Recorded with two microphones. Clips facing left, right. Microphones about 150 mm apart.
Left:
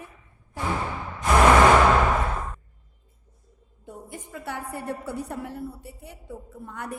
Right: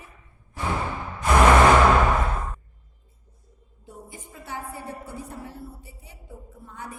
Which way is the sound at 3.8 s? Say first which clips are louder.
Left 3 dB; 60° left (ahead or behind).